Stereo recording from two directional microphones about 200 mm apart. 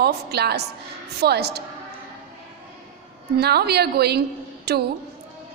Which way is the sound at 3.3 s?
55° right (ahead or behind).